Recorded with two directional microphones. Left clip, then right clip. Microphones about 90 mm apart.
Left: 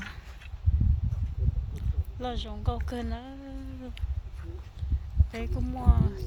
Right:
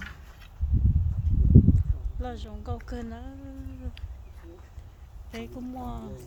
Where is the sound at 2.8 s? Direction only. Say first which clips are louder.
Left 3 dB; 20° left (ahead or behind).